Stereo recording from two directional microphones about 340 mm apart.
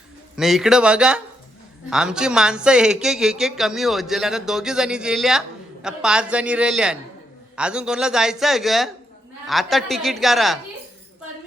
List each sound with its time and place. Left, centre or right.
0.3 s speech: centre